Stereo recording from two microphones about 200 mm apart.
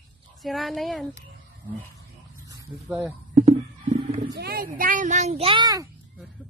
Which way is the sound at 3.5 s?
30° right (ahead or behind).